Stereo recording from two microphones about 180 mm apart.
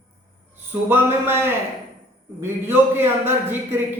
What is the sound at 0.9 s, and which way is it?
A man's voice, 10° right (ahead or behind).